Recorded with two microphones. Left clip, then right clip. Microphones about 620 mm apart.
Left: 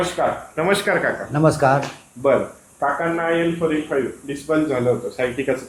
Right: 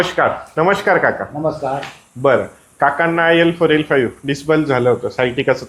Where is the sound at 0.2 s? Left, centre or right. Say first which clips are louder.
Right 5 dB; right.